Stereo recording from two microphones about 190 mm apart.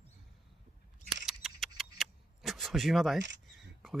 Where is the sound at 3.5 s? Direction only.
Centre (ahead or behind).